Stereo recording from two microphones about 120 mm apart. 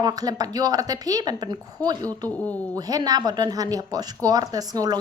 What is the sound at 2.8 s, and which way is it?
A woman's voice, 35° right (ahead or behind).